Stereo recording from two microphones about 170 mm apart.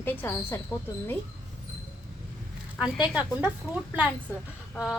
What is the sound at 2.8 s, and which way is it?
Speech, 5° right (ahead or behind).